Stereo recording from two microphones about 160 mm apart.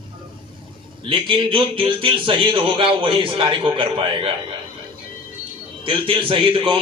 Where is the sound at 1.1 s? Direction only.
30° right (ahead or behind).